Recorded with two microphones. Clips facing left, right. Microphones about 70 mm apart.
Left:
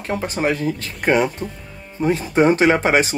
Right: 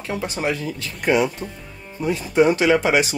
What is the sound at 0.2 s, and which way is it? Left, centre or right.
Speech, left.